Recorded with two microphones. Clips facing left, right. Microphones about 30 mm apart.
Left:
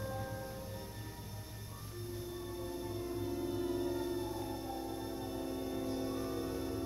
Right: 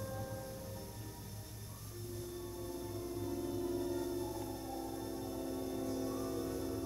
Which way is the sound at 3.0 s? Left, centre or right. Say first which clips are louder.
Left 2 dB; left.